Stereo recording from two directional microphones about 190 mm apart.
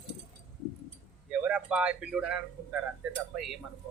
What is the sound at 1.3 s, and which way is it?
Speech, 5° right (ahead or behind).